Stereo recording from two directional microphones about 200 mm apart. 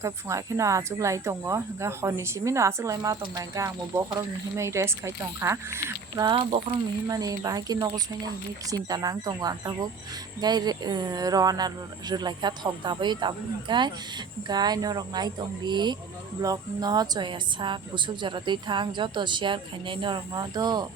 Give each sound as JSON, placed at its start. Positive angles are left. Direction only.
{"t": 0.0, "sound": "a woman's voice", "side_deg": -15}